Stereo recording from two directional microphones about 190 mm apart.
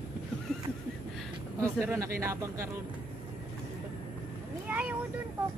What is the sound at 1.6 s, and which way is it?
Speech, 15° right (ahead or behind).